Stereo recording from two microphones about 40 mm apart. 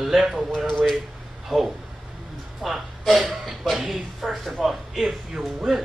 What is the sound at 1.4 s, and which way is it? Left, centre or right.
Speech, centre.